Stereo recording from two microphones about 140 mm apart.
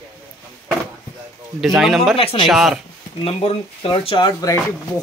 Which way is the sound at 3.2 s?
45° left (ahead or behind).